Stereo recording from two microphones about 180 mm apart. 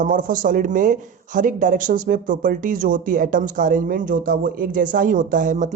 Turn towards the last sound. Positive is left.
turn(degrees=-45)  # may be behind; listen again after turning